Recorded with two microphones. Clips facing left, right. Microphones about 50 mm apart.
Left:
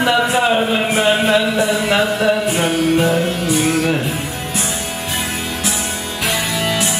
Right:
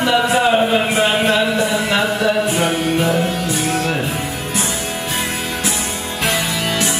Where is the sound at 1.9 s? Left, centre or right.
Centre.